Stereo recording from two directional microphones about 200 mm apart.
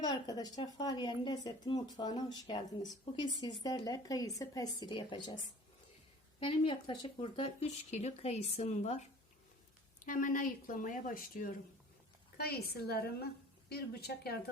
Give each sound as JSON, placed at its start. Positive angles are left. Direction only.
{"t": 0.0, "sound": "a woman's voice", "side_deg": 20}
{"t": 6.4, "sound": "speech", "side_deg": 25}
{"t": 10.1, "sound": "speech", "side_deg": 40}